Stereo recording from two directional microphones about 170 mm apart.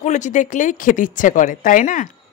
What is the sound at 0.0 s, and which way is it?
A woman's voice, 45° left (ahead or behind).